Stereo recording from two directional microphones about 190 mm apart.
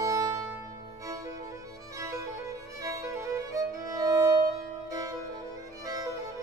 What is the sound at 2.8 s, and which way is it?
Music, 15° right (ahead or behind).